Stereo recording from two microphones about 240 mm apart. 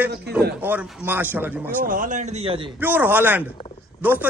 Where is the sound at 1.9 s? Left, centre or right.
Right.